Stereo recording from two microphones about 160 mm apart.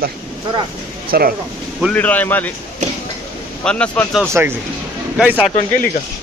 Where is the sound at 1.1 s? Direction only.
65° right (ahead or behind).